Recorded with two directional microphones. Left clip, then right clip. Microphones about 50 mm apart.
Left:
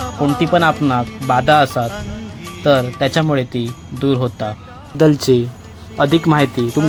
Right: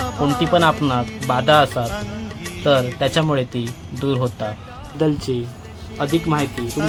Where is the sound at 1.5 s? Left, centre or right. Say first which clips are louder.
Left 1 dB; left.